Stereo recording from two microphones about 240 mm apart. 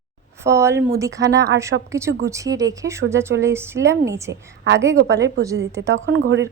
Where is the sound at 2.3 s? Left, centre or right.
Centre.